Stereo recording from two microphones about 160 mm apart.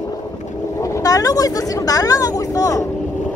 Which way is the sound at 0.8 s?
20° left (ahead or behind).